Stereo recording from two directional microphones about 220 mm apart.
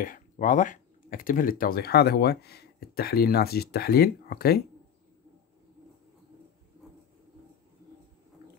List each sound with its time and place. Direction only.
0.0 s speech: 35° left (ahead or behind)